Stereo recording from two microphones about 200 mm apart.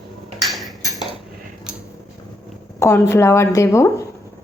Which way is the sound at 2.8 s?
15° left (ahead or behind).